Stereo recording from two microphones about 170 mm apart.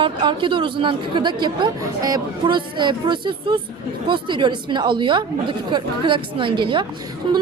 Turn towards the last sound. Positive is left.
turn(degrees=-30)  # may be behind; listen again after turning